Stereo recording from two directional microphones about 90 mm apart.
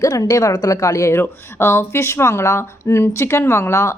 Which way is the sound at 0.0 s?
40° left (ahead or behind).